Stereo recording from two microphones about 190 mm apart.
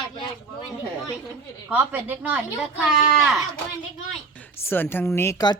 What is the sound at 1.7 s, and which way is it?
Speech, 10° right (ahead or behind).